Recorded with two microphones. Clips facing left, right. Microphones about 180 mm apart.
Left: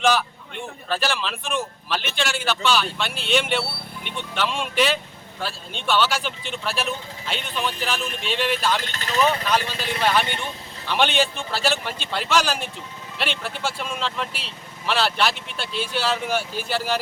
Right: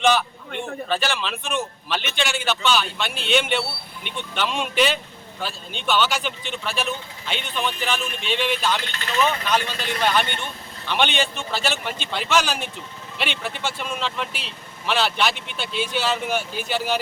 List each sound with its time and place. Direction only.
0.0 s a man's voice: centre (ahead or behind)
8.8 s speech: 40° left (ahead or behind)
9.4 s speech: 5° left (ahead or behind)